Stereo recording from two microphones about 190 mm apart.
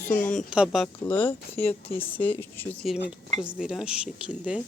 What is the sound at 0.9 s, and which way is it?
Speech, 25° left (ahead or behind).